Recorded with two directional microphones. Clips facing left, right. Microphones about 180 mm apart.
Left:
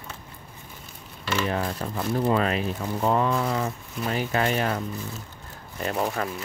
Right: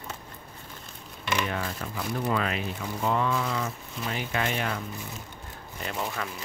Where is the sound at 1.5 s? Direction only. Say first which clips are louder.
Left 5 dB; 35° left (ahead or behind).